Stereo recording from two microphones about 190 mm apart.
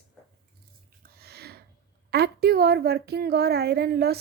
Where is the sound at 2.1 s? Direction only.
55° right (ahead or behind).